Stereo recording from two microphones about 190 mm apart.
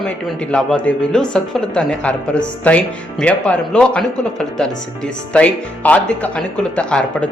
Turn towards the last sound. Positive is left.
turn(degrees=5)  # may be behind; listen again after turning